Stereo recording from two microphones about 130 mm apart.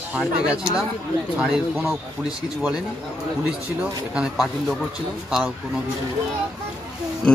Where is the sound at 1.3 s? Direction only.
10° right (ahead or behind).